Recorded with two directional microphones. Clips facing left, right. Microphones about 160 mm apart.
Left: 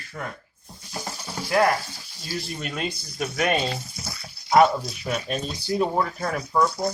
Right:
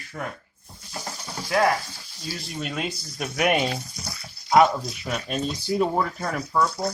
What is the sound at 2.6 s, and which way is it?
Speech, centre (ahead or behind).